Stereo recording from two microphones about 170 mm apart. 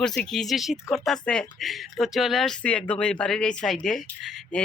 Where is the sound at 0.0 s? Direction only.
5° left (ahead or behind).